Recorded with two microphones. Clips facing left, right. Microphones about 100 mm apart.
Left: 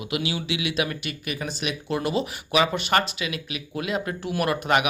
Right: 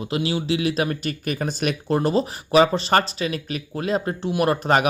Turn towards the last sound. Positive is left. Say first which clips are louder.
# right 3 dB
turn(degrees=-35)  # may be behind; listen again after turning